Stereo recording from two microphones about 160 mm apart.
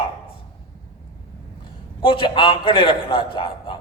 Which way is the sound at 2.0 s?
35° left (ahead or behind).